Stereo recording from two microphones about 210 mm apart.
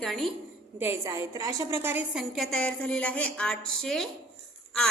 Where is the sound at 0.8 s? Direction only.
15° right (ahead or behind).